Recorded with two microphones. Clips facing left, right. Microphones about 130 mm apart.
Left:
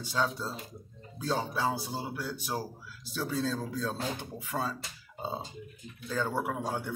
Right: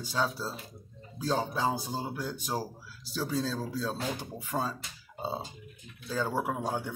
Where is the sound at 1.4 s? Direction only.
15° right (ahead or behind).